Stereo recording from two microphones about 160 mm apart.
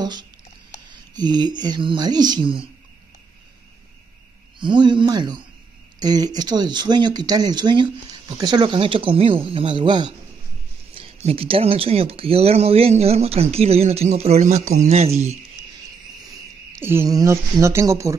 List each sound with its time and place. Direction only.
0.0 s patter: 25° right (ahead or behind)
1.1 s speech: 25° right (ahead or behind)
4.6 s speech: 30° right (ahead or behind)
16.8 s speech: 15° right (ahead or behind)